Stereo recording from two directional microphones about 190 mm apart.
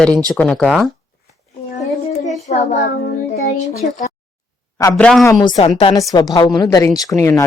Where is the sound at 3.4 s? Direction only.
35° left (ahead or behind).